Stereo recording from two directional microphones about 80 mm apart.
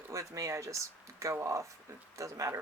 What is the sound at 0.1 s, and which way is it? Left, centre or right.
Speech, right.